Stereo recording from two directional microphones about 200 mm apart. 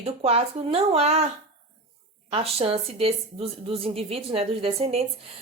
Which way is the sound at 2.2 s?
30° right (ahead or behind).